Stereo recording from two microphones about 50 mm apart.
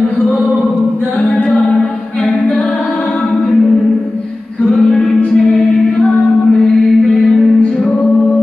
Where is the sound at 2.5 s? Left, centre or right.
Left.